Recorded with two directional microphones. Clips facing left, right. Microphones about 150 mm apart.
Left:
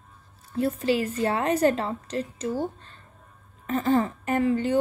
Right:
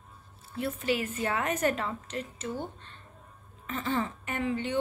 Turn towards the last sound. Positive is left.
turn(degrees=40)  # may be behind; listen again after turning